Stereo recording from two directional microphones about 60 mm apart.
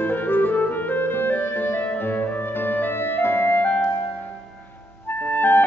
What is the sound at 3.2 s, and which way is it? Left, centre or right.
Clarinet, left.